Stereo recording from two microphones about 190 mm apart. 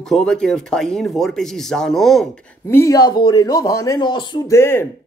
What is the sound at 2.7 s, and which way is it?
Speech, 15° left (ahead or behind).